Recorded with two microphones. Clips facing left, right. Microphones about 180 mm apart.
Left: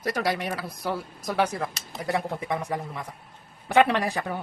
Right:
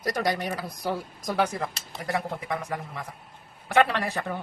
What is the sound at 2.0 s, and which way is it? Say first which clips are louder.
A man's voice: left 2 dB; 20° left (ahead or behind).